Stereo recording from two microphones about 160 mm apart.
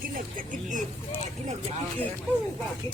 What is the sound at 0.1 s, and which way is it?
Speech, 55° right (ahead or behind).